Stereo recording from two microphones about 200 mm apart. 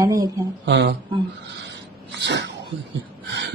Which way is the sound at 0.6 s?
60° right (ahead or behind).